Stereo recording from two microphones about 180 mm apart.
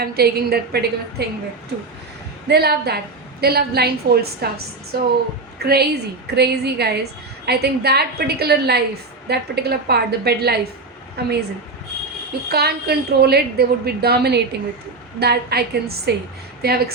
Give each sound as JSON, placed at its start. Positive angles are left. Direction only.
{"t": 0.0, "sound": "a woman's voice", "side_deg": -60}
{"t": 2.5, "sound": "a woman's voice", "side_deg": -60}
{"t": 12.5, "sound": "a woman's voice", "side_deg": -60}